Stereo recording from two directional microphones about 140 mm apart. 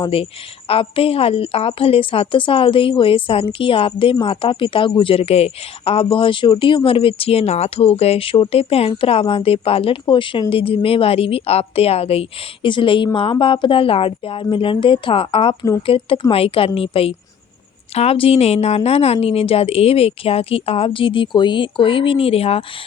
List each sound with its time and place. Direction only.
0.0 s a woman's voice: 40° left (ahead or behind)